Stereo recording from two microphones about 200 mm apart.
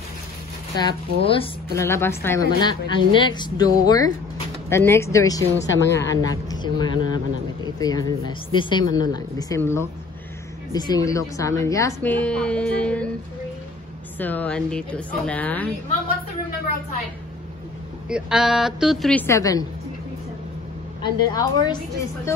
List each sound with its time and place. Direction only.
0.7 s a woman's voice: 25° left (ahead or behind)
1.8 s a woman's voice: 10° left (ahead or behind)
14.1 s a woman's voice: 10° left (ahead or behind)
18.0 s a woman's voice: 5° right (ahead or behind); by 19.6 s 15° left (ahead or behind)
21.0 s a woman's voice: 20° left (ahead or behind)